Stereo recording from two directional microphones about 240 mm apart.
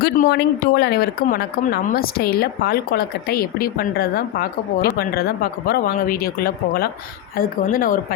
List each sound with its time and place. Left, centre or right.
0.0 s speech: left